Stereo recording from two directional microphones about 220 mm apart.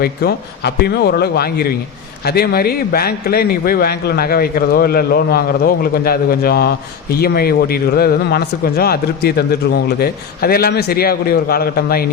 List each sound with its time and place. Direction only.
0.0 s speech: 45° left (ahead or behind)